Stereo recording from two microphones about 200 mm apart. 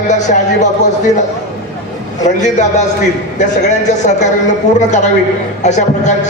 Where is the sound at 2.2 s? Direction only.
35° left (ahead or behind).